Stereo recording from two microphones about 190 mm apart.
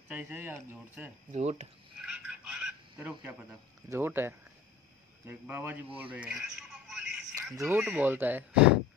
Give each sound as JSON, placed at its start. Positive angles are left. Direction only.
{"t": 0.1, "sound": "speech", "side_deg": -10}
{"t": 1.3, "sound": "speech", "side_deg": -35}
{"t": 2.0, "sound": "frog", "side_deg": -5}
{"t": 3.9, "sound": "speech", "side_deg": -10}
{"t": 5.9, "sound": "telephone", "side_deg": -5}
{"t": 7.5, "sound": "speech", "side_deg": -15}